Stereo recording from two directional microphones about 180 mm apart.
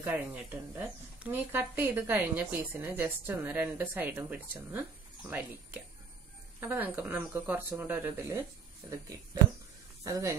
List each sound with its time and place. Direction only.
0.0 s speech: 10° right (ahead or behind)
6.6 s speech: 10° right (ahead or behind)
10.0 s speech: 20° right (ahead or behind)